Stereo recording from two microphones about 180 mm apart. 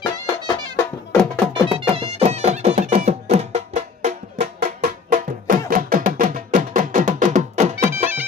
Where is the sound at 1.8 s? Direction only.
35° right (ahead or behind).